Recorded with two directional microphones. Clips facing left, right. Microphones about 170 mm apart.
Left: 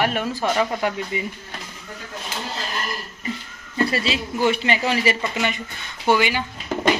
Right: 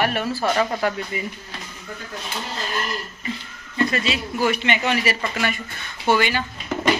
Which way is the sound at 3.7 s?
35° left (ahead or behind).